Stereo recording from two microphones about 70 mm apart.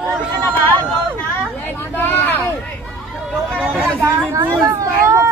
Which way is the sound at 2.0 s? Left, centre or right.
Left.